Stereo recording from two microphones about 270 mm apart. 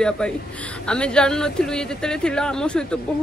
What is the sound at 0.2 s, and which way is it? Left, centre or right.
Speech, centre.